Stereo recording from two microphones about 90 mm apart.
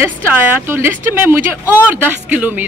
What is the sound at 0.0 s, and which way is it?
A woman's voice, 25° right (ahead or behind).